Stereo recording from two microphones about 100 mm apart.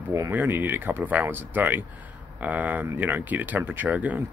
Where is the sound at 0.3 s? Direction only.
20° right (ahead or behind).